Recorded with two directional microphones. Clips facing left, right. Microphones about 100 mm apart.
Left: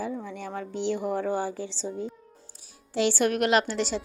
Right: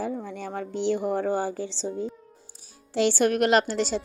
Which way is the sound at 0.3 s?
35° right (ahead or behind).